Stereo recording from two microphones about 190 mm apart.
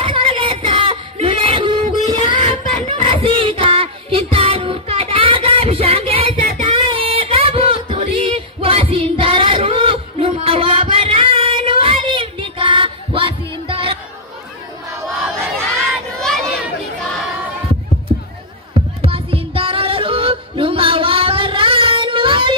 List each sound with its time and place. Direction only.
0.0 s a sound: 25° right (ahead or behind)
16.2 s chatter: 5° left (ahead or behind)
18.9 s music: 30° right (ahead or behind)